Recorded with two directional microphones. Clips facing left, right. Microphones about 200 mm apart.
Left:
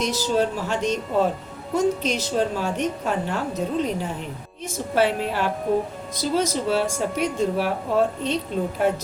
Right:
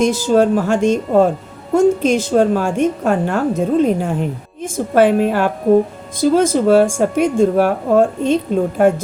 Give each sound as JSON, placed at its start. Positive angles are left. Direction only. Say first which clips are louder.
{"t": 0.0, "sound": "a woman's voice", "louder": "right 9 dB", "side_deg": -50}